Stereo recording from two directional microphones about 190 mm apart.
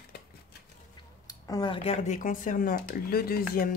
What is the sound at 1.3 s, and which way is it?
Speech, 20° left (ahead or behind).